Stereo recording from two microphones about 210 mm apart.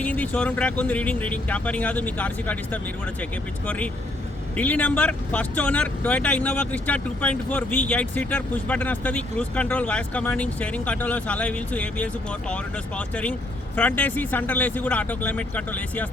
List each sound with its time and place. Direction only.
0.0 s speech: 5° left (ahead or behind)
4.5 s speech: 5° left (ahead or behind)